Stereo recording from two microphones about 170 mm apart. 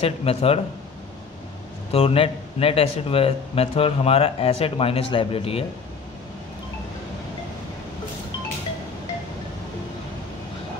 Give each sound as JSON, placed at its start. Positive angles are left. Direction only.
{"t": 0.0, "sound": "a man's voice", "side_deg": 35}
{"t": 1.9, "sound": "a man's voice", "side_deg": 35}